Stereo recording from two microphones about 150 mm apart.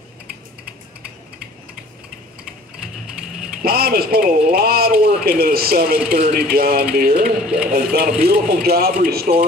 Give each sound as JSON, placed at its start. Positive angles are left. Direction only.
{"t": 3.6, "sound": "a man's voice", "side_deg": -90}
{"t": 6.5, "sound": "a sound", "side_deg": -90}
{"t": 7.4, "sound": "speech", "side_deg": -5}
{"t": 7.7, "sound": "a man's voice", "side_deg": -90}
{"t": 8.2, "sound": "speech", "side_deg": -75}
{"t": 8.6, "sound": "a man's voice", "side_deg": -90}